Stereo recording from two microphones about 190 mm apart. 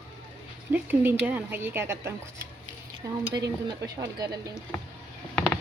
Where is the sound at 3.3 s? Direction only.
20° right (ahead or behind).